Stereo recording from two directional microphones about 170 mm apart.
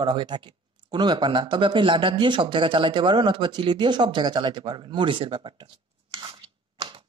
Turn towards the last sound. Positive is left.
turn(degrees=-30)  # may be behind; listen again after turning